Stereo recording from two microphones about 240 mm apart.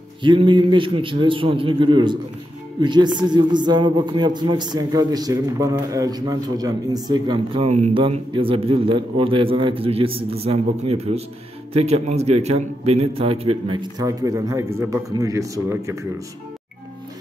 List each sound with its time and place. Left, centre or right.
0.2 s a man's voice: centre